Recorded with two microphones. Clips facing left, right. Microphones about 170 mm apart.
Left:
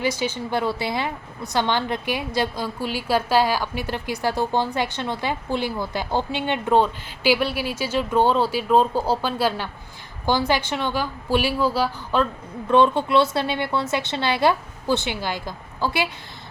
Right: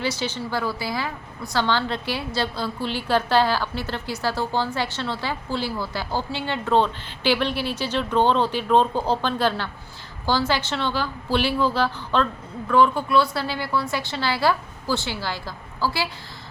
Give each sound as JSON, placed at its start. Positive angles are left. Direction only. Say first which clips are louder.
{"t": 0.0, "sound": "a woman's voice", "louder": "left 2 dB", "side_deg": 10}
{"t": 0.6, "sound": "a woman's voice", "louder": "left 3 dB", "side_deg": 25}
{"t": 12.6, "sound": "a woman's voice", "louder": "left 2 dB", "side_deg": 25}